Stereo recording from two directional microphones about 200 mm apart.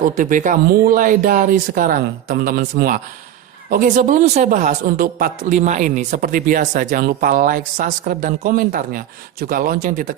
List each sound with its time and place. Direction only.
0.0 s a man's voice: 40° right (ahead or behind)